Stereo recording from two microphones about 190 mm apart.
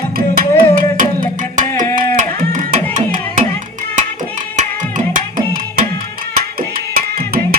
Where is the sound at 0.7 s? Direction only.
45° right (ahead or behind).